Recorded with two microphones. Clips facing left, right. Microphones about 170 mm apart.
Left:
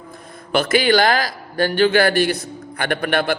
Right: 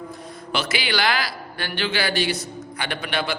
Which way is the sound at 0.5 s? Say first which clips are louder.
Left 9 dB; 50° left (ahead or behind).